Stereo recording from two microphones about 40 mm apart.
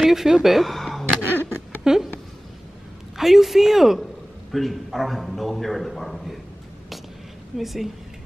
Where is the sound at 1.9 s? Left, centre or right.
Centre.